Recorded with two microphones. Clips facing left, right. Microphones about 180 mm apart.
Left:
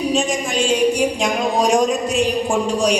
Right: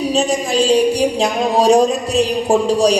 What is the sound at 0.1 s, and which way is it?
Speech, 35° right (ahead or behind).